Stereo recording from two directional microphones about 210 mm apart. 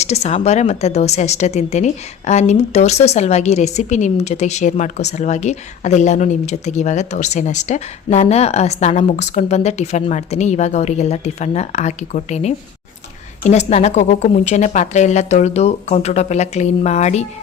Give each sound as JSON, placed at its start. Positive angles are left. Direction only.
{"t": 0.0, "sound": "a woman's voice", "side_deg": 30}